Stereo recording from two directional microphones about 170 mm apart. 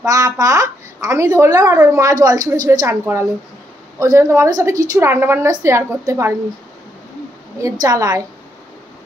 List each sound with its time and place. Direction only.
0.0 s a woman's voice: 20° right (ahead or behind)
7.8 s speech: 20° right (ahead or behind)